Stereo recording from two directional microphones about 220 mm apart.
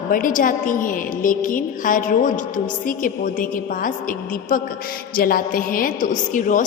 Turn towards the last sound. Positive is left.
turn(degrees=35)  # may be behind; listen again after turning